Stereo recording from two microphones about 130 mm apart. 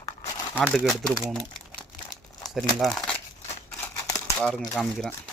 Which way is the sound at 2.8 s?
Centre (ahead or behind).